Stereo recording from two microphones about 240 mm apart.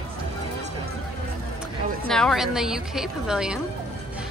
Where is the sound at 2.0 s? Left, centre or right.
Centre.